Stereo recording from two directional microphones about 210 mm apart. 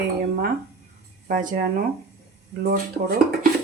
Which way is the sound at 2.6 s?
45° right (ahead or behind).